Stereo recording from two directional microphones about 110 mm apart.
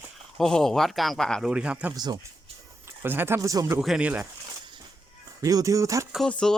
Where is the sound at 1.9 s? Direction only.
35° right (ahead or behind).